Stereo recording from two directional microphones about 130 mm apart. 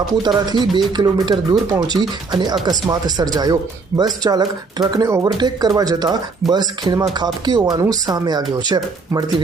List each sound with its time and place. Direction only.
0.1 s speech: 35° right (ahead or behind)